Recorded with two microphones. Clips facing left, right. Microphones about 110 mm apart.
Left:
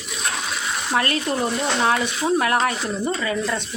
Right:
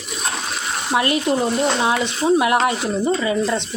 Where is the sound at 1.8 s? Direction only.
15° right (ahead or behind).